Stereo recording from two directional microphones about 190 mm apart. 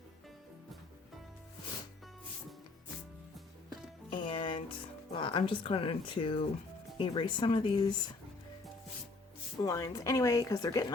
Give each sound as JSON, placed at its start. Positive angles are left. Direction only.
{"t": 4.1, "sound": "music", "side_deg": 25}
{"t": 5.1, "sound": "speech", "side_deg": 25}
{"t": 9.6, "sound": "speech", "side_deg": 15}